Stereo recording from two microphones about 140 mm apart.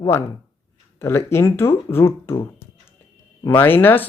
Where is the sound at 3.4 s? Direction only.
15° left (ahead or behind).